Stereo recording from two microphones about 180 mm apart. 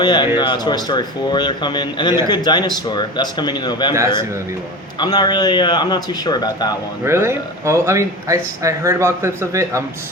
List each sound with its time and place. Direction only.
0.0 s speech: 25° left (ahead or behind)
4.9 s speech: 20° left (ahead or behind)
7.0 s speech: 15° right (ahead or behind)